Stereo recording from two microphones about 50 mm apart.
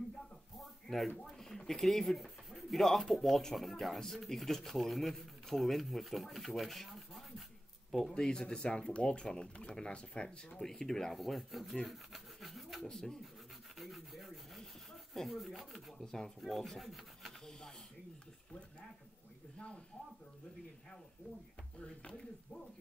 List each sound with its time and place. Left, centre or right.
0.6 s a sound: centre
1.1 s speech: centre
8.2 s speech: centre
12.9 s speech: centre
13.7 s rub: centre
16.0 s speech: centre
16.3 s rub: centre
17.5 s snake: centre
21.7 s speech: centre